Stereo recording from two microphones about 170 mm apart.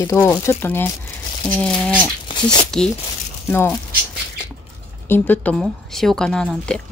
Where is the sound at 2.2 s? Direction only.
30° left (ahead or behind).